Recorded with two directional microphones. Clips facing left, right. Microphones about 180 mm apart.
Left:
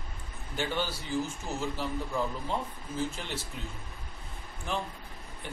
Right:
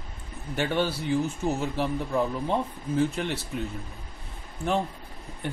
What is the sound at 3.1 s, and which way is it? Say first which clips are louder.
Speech: right 9 dB; 65° right (ahead or behind).